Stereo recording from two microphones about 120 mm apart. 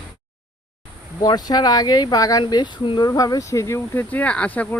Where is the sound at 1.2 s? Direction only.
35° left (ahead or behind).